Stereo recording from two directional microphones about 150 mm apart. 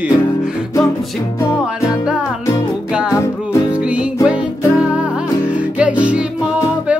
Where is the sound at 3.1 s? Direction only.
20° left (ahead or behind).